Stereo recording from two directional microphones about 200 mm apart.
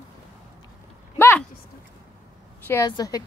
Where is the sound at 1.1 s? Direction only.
10° left (ahead or behind).